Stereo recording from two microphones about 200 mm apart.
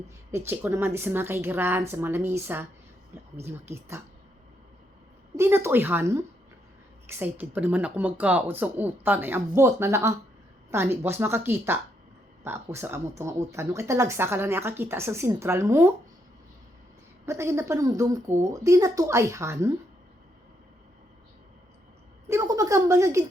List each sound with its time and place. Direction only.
0.3 s speech: 10° right (ahead or behind)
5.4 s speech: 10° right (ahead or behind)
17.2 s speech: 15° right (ahead or behind)
22.3 s speech: 15° right (ahead or behind)